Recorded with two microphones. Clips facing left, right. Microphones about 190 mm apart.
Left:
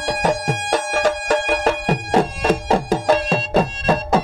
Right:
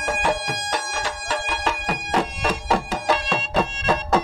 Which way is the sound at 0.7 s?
55° left (ahead or behind).